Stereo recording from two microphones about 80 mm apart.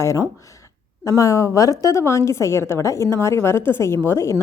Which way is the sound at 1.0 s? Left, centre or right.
Left.